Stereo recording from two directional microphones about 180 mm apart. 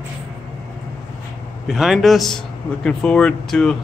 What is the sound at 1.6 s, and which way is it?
Speech, centre (ahead or behind).